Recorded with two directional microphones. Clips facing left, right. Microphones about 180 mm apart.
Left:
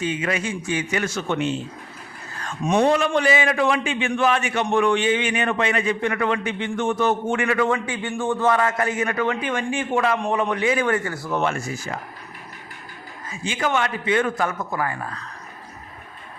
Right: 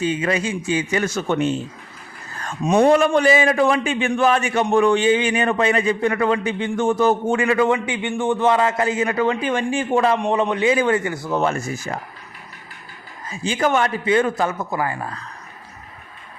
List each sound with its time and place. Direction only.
0.0 s a man's voice: 35° right (ahead or behind)
11.3 s a man's voice: 35° right (ahead or behind)
13.4 s a man's voice: 35° right (ahead or behind)